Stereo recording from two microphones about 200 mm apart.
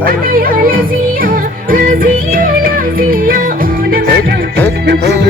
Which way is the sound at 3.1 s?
45° right (ahead or behind).